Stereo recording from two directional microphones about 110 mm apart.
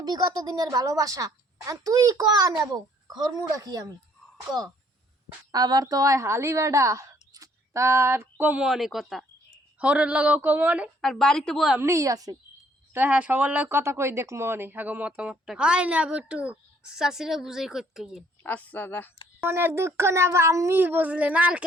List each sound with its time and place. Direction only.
0.0 s a woman's voice: 40° right (ahead or behind)
5.5 s a woman's voice: 35° right (ahead or behind); by 8.6 s 15° right (ahead or behind)
8.6 s speech: centre (ahead or behind)
11.0 s speech: 5° left (ahead or behind)
11.8 s a woman's voice: 30° right (ahead or behind)
12.9 s speech: 15° right (ahead or behind)
18.4 s speech: 15° left (ahead or behind)
19.4 s speech: 20° right (ahead or behind)